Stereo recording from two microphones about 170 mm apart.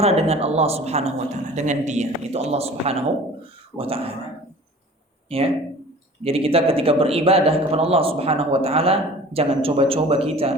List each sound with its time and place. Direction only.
0.0 s a man's voice: 40° right (ahead or behind)
5.3 s a man's voice: 35° right (ahead or behind)